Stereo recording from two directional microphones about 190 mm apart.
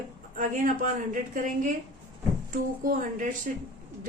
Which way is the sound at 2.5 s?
45° right (ahead or behind).